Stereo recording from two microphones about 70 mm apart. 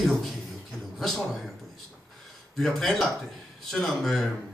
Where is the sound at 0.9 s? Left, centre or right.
Centre.